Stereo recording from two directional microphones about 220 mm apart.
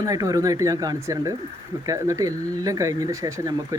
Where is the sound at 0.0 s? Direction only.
15° right (ahead or behind).